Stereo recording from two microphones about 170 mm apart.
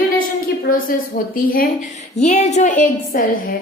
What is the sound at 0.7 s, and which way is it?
Speech, 60° left (ahead or behind).